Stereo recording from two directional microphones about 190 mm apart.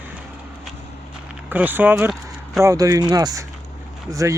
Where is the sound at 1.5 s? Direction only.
10° right (ahead or behind).